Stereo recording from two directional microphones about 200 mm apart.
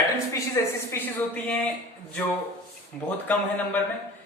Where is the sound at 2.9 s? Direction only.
5° left (ahead or behind).